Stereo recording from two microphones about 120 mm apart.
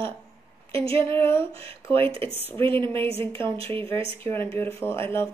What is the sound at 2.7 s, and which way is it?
Speech, 20° left (ahead or behind).